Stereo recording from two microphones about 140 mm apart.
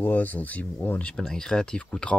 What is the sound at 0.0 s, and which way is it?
Speech, 10° left (ahead or behind).